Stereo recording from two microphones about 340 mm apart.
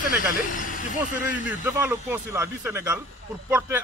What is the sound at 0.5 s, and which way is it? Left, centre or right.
Speech, left.